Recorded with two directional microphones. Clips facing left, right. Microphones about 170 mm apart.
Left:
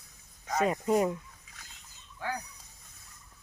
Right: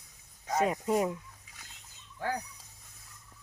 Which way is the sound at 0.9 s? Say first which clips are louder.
Left 4 dB; 5° right (ahead or behind).